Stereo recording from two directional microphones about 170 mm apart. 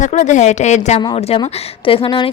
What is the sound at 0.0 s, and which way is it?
A woman's voice, 45° left (ahead or behind).